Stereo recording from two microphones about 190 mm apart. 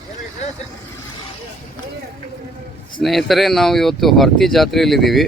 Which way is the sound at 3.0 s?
Centre (ahead or behind).